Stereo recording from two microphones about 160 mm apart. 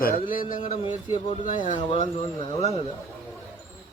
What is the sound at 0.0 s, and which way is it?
Speech, 65° left (ahead or behind).